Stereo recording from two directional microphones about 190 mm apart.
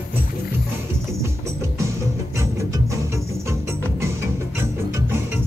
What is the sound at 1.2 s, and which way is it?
Music, 15° right (ahead or behind).